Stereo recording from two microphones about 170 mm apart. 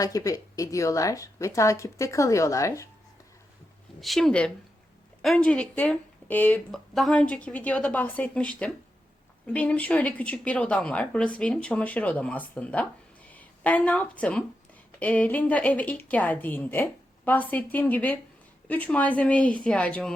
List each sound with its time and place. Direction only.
0.0 s speech: 20° left (ahead or behind)
4.0 s speech: centre (ahead or behind)